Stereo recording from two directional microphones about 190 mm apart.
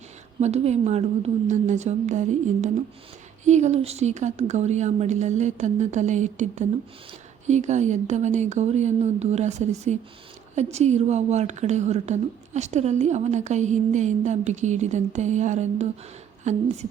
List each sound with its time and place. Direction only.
0.3 s a woman's voice: 35° right (ahead or behind)